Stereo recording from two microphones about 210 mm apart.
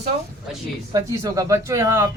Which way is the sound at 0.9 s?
15° right (ahead or behind).